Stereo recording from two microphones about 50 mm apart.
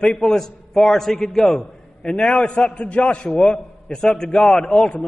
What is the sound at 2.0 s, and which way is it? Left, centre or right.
A man's voice, centre.